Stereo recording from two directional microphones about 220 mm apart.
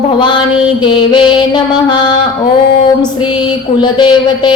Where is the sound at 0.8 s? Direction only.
20° left (ahead or behind).